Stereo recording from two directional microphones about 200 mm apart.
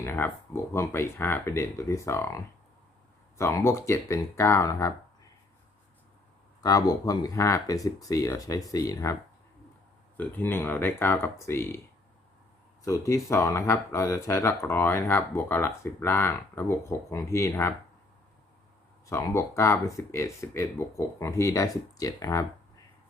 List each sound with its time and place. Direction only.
0.0 s speech: 10° left (ahead or behind)
6.6 s speech: 20° left (ahead or behind)
10.2 s speech: 10° left (ahead or behind)
12.8 s speech: 15° left (ahead or behind)
19.0 s speech: 15° left (ahead or behind)